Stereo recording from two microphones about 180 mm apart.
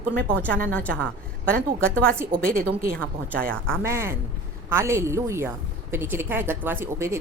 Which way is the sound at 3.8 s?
15° right (ahead or behind).